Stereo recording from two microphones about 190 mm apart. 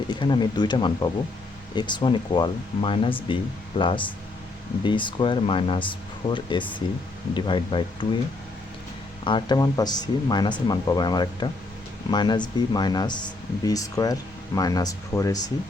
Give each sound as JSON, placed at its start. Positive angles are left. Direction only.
{"t": 0.1, "sound": "speech", "side_deg": 25}
{"t": 9.2, "sound": "speech", "side_deg": 25}